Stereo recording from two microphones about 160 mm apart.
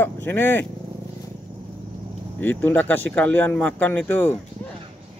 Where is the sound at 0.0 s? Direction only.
10° left (ahead or behind).